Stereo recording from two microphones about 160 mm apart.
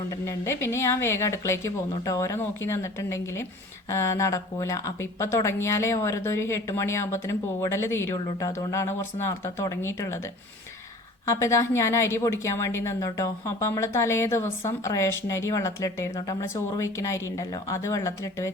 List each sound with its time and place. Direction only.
0.3 s a woman's voice: 15° left (ahead or behind)
11.3 s a woman's voice: 20° left (ahead or behind)